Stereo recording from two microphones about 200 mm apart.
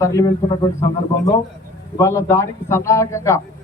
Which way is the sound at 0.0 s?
15° left (ahead or behind).